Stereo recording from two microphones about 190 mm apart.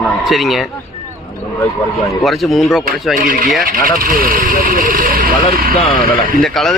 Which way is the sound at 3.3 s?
50° right (ahead or behind).